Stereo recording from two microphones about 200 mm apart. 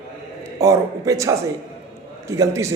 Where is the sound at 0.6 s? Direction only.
15° right (ahead or behind).